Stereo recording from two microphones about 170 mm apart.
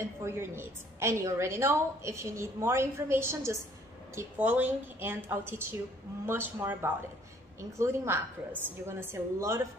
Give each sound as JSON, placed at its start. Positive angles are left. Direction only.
{"t": 0.0, "sound": "a woman's voice", "side_deg": -15}